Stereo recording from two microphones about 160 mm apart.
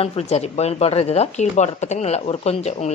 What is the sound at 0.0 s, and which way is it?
Speech, 40° left (ahead or behind).